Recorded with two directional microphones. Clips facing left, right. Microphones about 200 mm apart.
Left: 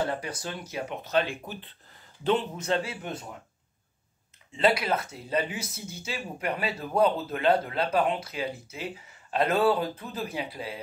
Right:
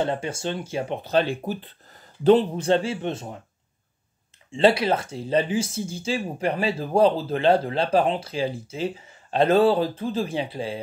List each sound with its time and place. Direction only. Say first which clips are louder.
0.0 s speech: right 5 dB; 25° right (ahead or behind)
4.5 s speech: right 6 dB; 25° right (ahead or behind)